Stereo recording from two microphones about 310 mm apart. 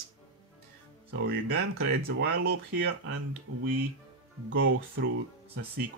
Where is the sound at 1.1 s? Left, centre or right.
Right.